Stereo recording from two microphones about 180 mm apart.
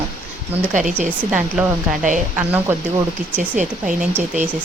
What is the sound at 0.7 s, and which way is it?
Speech, 45° right (ahead or behind).